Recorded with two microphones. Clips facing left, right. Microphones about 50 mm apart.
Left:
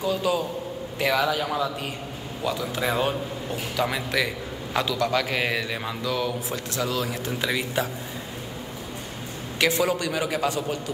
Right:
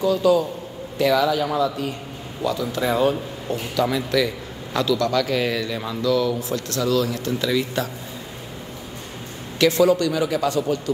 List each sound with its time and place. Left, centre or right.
0.0 s a man's voice: left
2.4 s a man's voice: left
9.6 s a man's voice: left